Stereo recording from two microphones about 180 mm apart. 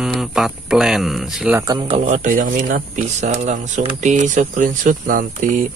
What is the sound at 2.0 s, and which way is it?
Speech, 45° right (ahead or behind).